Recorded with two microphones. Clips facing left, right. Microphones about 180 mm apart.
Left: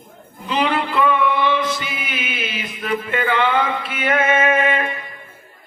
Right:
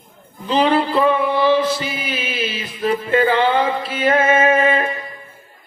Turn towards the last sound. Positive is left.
turn(degrees=-30)  # may be behind; listen again after turning